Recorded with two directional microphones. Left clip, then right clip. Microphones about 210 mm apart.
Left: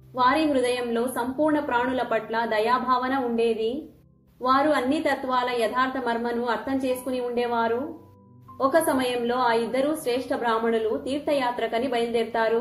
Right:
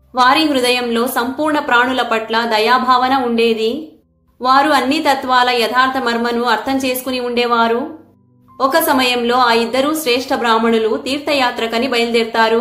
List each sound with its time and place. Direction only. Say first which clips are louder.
0.2 s a woman's voice: right 9 dB; 15° right (ahead or behind)